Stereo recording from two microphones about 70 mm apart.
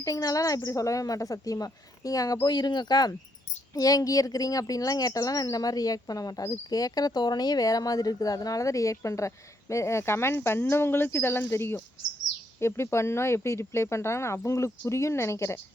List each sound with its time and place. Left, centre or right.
0.0 s speech: left
3.8 s speech: left